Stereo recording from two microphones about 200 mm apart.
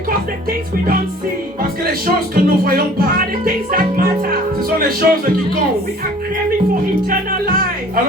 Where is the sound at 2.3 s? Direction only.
45° right (ahead or behind).